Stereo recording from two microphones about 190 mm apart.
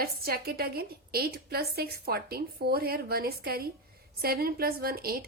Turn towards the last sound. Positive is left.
turn(degrees=-50)  # may be behind; listen again after turning